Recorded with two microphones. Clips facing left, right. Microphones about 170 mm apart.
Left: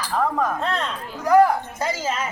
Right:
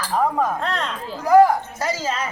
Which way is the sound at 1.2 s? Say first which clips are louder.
Right 2 dB; 5° right (ahead or behind).